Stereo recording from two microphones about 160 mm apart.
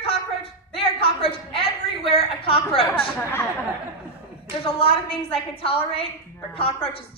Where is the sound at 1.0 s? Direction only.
35° left (ahead or behind).